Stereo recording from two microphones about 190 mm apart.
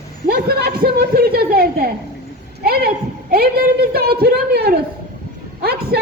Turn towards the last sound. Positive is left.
turn(degrees=-55)  # may be behind; listen again after turning